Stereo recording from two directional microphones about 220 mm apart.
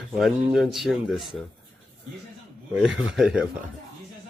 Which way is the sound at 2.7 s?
Centre (ahead or behind).